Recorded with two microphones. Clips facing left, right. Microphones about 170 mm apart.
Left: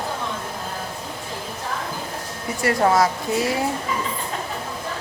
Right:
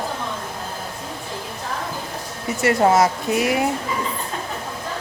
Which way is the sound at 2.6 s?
25° right (ahead or behind).